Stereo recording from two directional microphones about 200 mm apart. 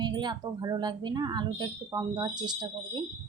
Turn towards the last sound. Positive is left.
turn(degrees=-20)  # may be behind; listen again after turning